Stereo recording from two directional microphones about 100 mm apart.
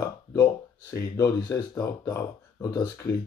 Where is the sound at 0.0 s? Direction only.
30° left (ahead or behind).